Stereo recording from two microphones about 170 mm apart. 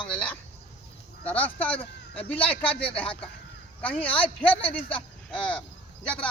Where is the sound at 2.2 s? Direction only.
35° left (ahead or behind).